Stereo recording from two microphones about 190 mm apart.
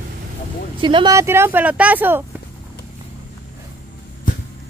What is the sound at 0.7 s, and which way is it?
Speech, 25° right (ahead or behind).